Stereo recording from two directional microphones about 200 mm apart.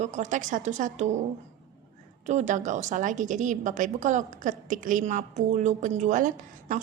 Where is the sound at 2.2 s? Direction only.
35° right (ahead or behind).